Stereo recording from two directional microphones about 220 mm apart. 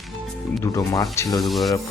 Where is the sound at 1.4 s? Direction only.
Centre (ahead or behind).